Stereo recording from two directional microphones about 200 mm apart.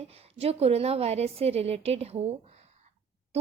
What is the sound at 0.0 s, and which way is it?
A woman's voice, 30° right (ahead or behind).